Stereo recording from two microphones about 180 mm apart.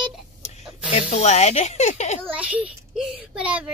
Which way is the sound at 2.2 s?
10° right (ahead or behind).